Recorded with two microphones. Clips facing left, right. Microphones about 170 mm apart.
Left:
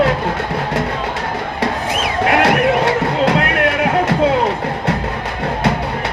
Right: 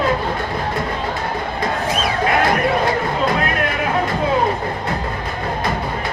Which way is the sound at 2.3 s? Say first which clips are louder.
Left 4 dB; 75° left (ahead or behind).